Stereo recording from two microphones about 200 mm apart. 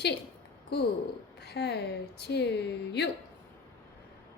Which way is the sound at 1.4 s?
55° left (ahead or behind).